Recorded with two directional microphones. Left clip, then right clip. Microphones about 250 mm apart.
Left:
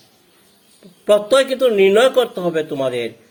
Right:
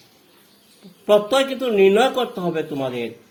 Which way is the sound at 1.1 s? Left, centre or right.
Left.